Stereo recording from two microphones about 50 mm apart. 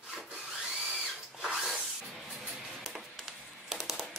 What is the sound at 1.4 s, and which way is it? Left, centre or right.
Drill, centre.